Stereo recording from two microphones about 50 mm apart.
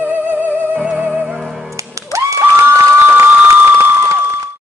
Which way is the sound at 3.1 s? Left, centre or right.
Right.